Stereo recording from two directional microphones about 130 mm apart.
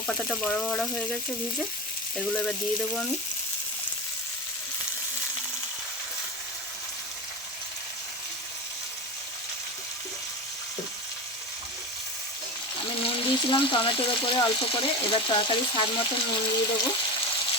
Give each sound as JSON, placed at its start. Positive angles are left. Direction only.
{"t": 0.1, "sound": "frying", "side_deg": 5}
{"t": 2.1, "sound": "frying", "side_deg": 5}
{"t": 13.0, "sound": "speech", "side_deg": 45}